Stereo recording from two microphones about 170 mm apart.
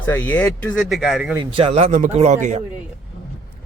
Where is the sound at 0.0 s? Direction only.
10° left (ahead or behind).